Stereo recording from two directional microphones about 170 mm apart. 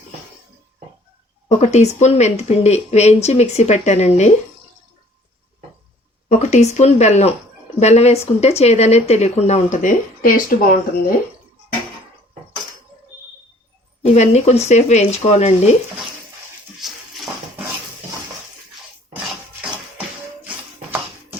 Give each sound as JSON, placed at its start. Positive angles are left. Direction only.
{"t": 1.5, "sound": "speech", "side_deg": 40}
{"t": 6.2, "sound": "speech", "side_deg": 45}
{"t": 14.1, "sound": "speech", "side_deg": 40}